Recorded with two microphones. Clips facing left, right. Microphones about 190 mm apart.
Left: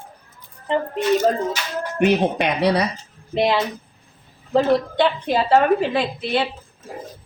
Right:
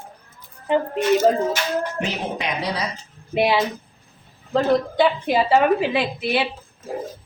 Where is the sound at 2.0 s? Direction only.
65° left (ahead or behind).